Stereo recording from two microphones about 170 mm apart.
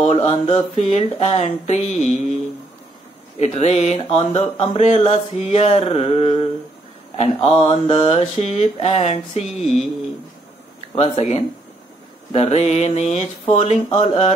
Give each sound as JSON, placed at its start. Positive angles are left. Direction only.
{"t": 0.0, "sound": "speech", "side_deg": 35}
{"t": 3.3, "sound": "speech", "side_deg": 40}
{"t": 11.0, "sound": "speech", "side_deg": 40}